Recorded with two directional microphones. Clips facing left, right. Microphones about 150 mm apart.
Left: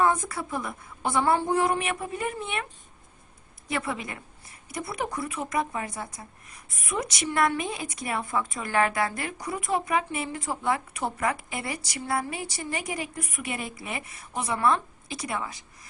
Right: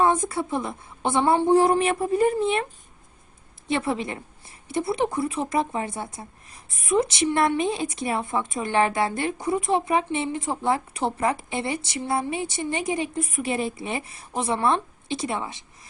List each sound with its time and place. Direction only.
0.0 s a woman's voice: 25° right (ahead or behind)
3.7 s a woman's voice: 30° right (ahead or behind)